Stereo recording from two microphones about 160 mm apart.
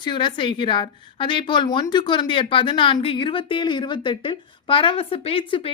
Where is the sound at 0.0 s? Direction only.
30° left (ahead or behind).